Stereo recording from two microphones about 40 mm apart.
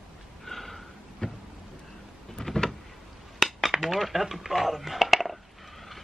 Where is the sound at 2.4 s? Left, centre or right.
Centre.